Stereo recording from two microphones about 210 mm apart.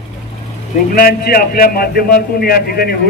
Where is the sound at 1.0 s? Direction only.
45° left (ahead or behind).